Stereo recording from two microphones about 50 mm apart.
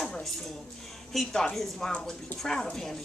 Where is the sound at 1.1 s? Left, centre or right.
Centre.